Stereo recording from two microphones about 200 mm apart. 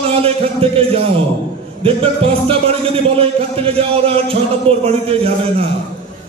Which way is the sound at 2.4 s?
30° right (ahead or behind).